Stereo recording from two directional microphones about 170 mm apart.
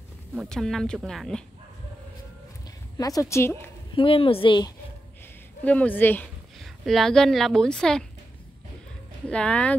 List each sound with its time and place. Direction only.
0.3 s speech: centre (ahead or behind)
3.0 s a woman's voice: 20° left (ahead or behind)
3.9 s speech: 30° left (ahead or behind)
5.6 s a woman's voice: 10° left (ahead or behind)
6.6 s speech: centre (ahead or behind)
9.3 s a woman's voice: 5° left (ahead or behind)